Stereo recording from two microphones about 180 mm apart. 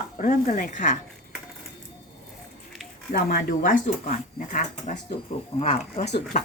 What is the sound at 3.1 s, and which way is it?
A woman's voice, 45° left (ahead or behind).